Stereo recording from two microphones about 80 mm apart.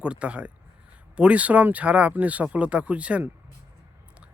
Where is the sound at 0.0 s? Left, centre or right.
Centre.